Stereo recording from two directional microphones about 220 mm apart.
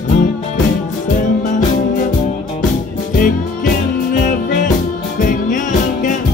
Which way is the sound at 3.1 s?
40° left (ahead or behind).